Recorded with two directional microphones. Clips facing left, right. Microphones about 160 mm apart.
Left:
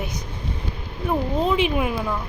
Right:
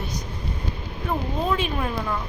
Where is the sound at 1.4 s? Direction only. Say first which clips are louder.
Left 4 dB; 15° left (ahead or behind).